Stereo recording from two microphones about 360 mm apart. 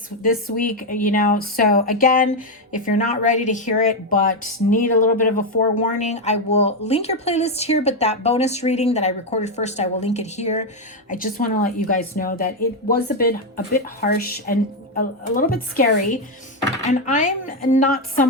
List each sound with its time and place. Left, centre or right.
0.2 s speech: left